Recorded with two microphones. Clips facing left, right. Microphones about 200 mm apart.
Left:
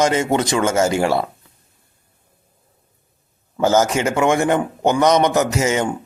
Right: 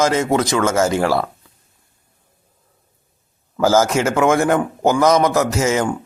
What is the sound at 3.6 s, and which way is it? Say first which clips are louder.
A man's voice: right 1 dB; 5° right (ahead or behind).